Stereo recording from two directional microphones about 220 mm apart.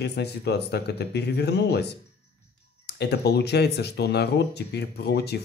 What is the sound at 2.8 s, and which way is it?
Speech, 50° left (ahead or behind).